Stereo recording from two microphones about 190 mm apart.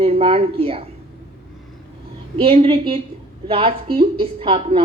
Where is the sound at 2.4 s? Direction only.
30° right (ahead or behind).